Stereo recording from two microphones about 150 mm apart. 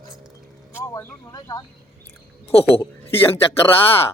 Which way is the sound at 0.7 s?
20° left (ahead or behind).